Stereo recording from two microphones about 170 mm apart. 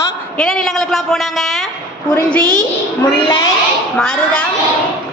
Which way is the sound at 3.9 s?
5° left (ahead or behind).